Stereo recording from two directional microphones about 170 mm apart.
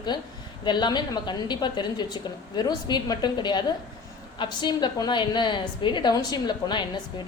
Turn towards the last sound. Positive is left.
turn(degrees=25)  # may be behind; listen again after turning